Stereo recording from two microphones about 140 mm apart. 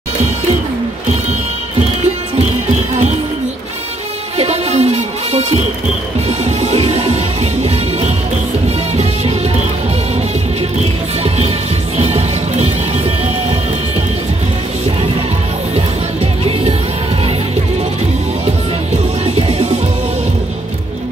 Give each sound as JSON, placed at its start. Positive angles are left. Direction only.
{"t": 4.4, "sound": "music", "side_deg": -50}
{"t": 8.6, "sound": "music", "side_deg": -50}
{"t": 11.2, "sound": "music", "side_deg": -45}
{"t": 19.2, "sound": "music", "side_deg": -45}